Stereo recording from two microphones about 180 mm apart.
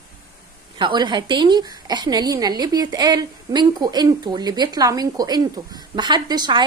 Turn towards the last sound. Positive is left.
turn(degrees=-25)  # may be behind; listen again after turning